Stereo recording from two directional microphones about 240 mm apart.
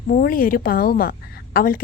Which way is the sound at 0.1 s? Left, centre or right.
Left.